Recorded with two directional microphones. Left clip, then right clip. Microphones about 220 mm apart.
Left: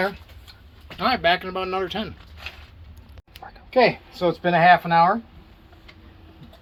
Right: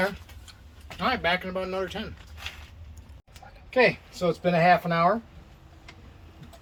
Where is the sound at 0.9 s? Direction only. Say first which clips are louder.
Left 5 dB; 40° left (ahead or behind).